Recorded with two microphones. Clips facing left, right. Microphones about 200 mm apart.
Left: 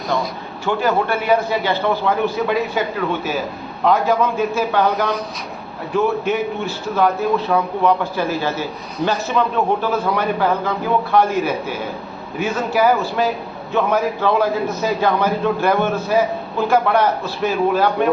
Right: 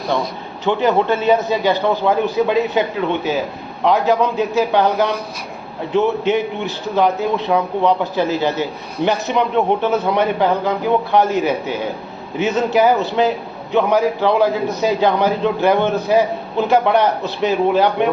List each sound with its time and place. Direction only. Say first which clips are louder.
0.2 s a man's voice: right 1 dB; 20° right (ahead or behind)
5.9 s a man's voice: right 2 dB; 20° right (ahead or behind)